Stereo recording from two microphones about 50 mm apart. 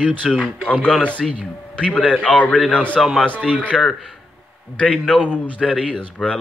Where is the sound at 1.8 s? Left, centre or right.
Left.